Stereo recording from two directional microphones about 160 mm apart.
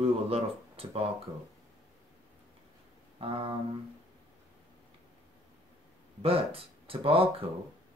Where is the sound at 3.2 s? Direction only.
35° right (ahead or behind).